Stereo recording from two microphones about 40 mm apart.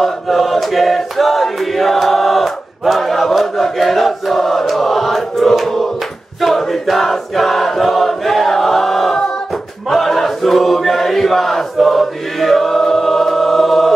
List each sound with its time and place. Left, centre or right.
0.0 s choir: centre
9.8 s chant: centre